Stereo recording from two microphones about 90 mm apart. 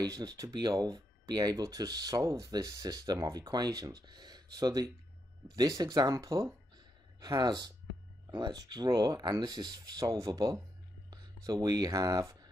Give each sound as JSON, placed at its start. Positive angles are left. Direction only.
{"t": 0.0, "sound": "speech", "side_deg": -45}
{"t": 7.2, "sound": "speech", "side_deg": -50}